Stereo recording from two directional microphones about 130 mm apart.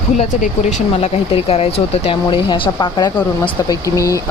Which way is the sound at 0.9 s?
50° left (ahead or behind).